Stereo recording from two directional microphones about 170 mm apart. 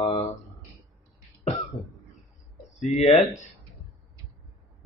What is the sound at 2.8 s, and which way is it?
Speech, 45° left (ahead or behind).